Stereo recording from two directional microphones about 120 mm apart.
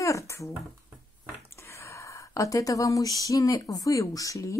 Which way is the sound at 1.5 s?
20° left (ahead or behind).